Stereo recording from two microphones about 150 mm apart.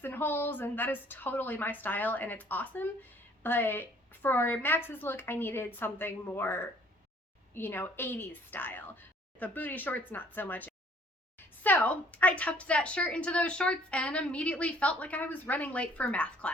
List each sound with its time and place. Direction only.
0.0 s a woman's voice: 15° left (ahead or behind)